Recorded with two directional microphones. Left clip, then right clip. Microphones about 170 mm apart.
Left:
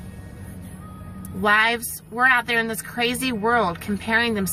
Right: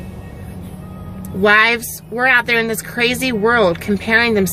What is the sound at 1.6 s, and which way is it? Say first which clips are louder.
Speech: right 6 dB; 15° right (ahead or behind).